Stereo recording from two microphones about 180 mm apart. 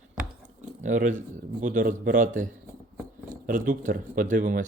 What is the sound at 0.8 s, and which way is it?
Speech, 45° right (ahead or behind).